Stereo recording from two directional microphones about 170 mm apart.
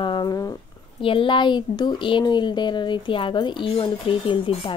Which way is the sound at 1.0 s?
30° left (ahead or behind).